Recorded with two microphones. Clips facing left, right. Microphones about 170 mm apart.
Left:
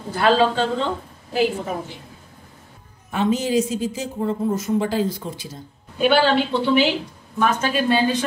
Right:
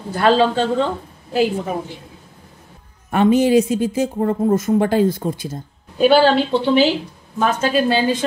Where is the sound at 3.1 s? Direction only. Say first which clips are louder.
Right 7 dB; 60° right (ahead or behind); by 6.9 s 35° right (ahead or behind).